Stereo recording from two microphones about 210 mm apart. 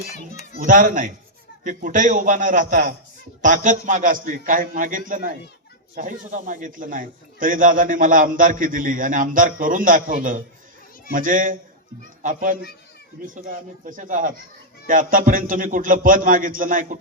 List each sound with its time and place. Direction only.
0.6 s a man's voice: 40° right (ahead or behind)